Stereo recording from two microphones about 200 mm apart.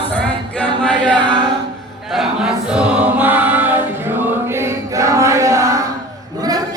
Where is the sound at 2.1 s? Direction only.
5° right (ahead or behind).